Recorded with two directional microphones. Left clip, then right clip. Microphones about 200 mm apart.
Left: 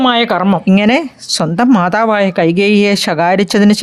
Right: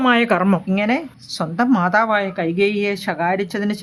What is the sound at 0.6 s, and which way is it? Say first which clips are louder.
Speech: left 8 dB; 40° left (ahead or behind).